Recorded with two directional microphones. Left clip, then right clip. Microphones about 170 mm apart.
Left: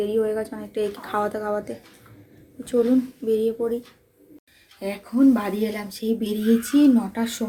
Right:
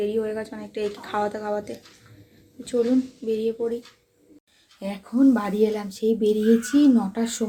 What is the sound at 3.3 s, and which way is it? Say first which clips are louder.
Speech: left 3 dB; centre (ahead or behind).